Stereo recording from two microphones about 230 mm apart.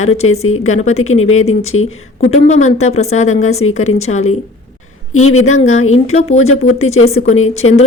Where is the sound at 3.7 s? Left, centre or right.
Left.